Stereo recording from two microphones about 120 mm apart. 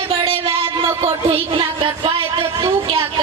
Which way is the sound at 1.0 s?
50° right (ahead or behind).